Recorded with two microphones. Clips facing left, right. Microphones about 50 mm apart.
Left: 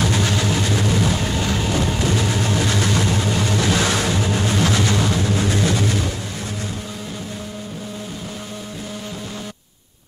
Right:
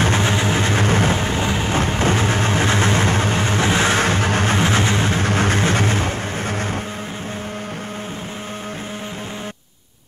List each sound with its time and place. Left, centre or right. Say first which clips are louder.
0.0 s vehicle: right 2 dB; right
4.6 s vehicle: right 1 dB; right
5.2 s music: right 2 dB; right